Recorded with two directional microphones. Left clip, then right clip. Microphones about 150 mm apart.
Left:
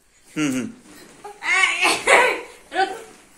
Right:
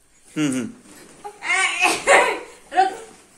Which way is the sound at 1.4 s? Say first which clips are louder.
Left 1 dB; 10° right (ahead or behind).